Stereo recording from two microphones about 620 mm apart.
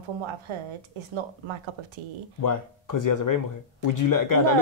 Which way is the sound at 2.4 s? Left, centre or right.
Left.